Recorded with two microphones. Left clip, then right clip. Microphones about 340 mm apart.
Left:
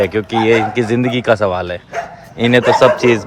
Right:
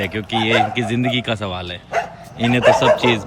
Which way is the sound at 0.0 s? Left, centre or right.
Centre.